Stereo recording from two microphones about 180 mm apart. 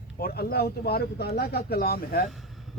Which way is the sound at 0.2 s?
60° left (ahead or behind).